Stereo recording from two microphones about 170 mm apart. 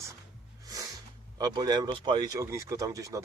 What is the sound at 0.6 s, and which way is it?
Music, 20° right (ahead or behind).